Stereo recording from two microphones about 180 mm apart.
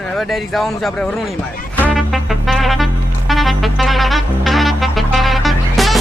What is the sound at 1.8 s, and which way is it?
Music, 5° right (ahead or behind).